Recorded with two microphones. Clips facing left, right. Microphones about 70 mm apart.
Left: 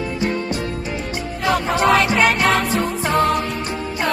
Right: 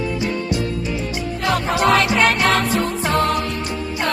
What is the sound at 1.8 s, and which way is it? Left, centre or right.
Music, centre.